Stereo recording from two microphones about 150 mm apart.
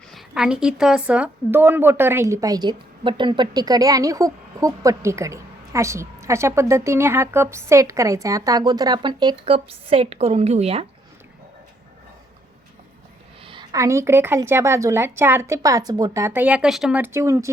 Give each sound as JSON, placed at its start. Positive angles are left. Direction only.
{"t": 0.1, "sound": "a woman's voice", "side_deg": 0}
{"t": 13.4, "sound": "a sound", "side_deg": -35}
{"t": 13.7, "sound": "a woman's voice", "side_deg": -20}
{"t": 17.0, "sound": "a woman's voice", "side_deg": -20}